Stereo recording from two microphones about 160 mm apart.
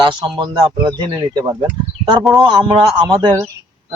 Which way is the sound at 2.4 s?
30° right (ahead or behind).